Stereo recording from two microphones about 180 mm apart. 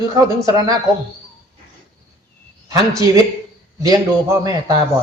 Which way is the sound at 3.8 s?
20° right (ahead or behind).